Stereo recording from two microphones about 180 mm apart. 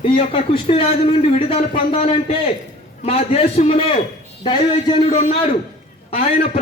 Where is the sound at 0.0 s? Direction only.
30° left (ahead or behind).